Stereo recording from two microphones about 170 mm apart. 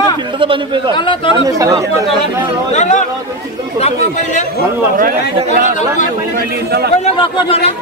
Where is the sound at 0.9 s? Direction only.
30° left (ahead or behind).